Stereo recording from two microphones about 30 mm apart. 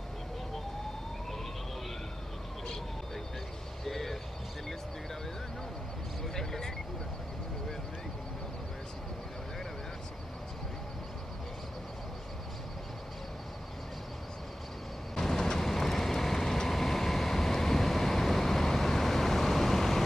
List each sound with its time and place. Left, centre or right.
3.8 s vehicle: centre
6.2 s a sound: centre
15.1 s vehicle: centre
15.6 s vehicle: centre